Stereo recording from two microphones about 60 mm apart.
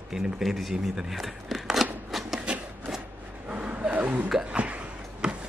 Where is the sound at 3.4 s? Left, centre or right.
Right.